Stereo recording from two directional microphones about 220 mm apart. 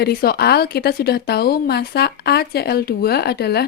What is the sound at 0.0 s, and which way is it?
A woman's voice, 45° left (ahead or behind).